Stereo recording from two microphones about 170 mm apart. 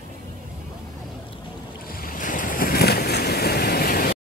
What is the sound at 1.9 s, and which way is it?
Boat, 55° left (ahead or behind).